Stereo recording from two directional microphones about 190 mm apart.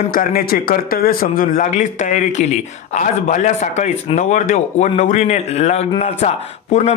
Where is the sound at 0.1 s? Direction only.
50° left (ahead or behind).